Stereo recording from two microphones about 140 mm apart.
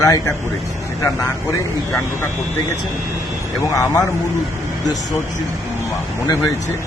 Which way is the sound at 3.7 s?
20° left (ahead or behind).